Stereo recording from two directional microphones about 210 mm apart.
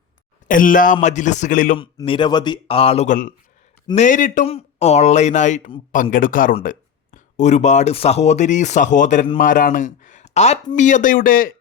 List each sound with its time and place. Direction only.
0.4 s a man's voice: 40° left (ahead or behind)
1.8 s a man's voice: 25° left (ahead or behind); by 11.5 s 40° left (ahead or behind)